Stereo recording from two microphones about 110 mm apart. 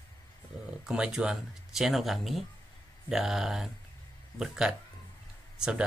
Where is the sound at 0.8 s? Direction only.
5° right (ahead or behind).